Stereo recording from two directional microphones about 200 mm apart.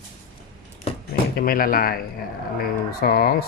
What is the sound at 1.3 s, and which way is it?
Speech, 45° left (ahead or behind).